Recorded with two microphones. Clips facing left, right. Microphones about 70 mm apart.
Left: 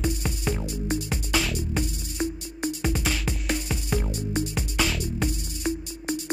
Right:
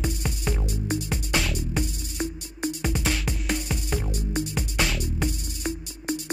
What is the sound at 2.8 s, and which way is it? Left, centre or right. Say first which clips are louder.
Music: even; centre.